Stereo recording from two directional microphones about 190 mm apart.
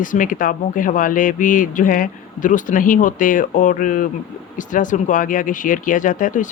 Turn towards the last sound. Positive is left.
turn(degrees=45)  # may be behind; listen again after turning